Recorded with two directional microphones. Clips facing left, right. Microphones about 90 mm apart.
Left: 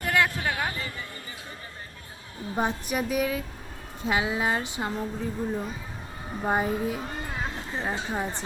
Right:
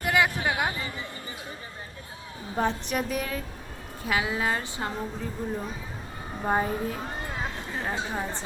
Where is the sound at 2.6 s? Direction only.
20° left (ahead or behind).